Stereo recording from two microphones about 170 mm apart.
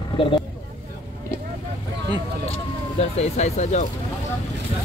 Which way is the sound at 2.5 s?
40° left (ahead or behind).